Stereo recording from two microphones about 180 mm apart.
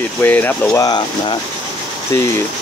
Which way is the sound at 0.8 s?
25° left (ahead or behind).